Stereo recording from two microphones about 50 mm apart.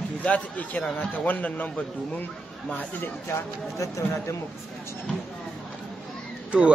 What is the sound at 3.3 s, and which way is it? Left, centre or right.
Speech, left.